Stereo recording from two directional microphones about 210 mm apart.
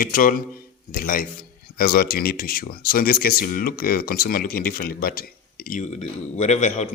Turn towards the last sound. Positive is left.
turn(degrees=35)  # may be behind; listen again after turning